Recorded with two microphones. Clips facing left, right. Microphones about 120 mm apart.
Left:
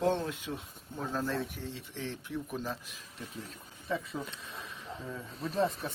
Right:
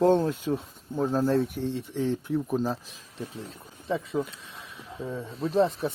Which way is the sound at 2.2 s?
40° right (ahead or behind).